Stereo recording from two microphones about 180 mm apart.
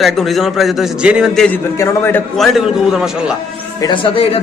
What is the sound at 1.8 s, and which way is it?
Speech, 15° left (ahead or behind).